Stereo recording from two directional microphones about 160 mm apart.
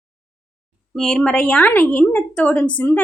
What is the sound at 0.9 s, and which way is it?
Speech, centre (ahead or behind).